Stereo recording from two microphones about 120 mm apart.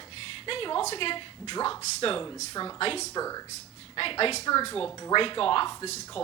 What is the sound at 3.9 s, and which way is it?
Speech, 50° left (ahead or behind).